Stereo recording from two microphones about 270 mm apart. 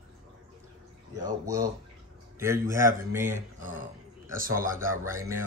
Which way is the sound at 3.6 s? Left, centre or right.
Right.